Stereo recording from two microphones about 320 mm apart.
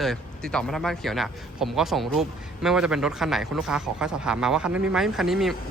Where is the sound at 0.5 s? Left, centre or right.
Centre.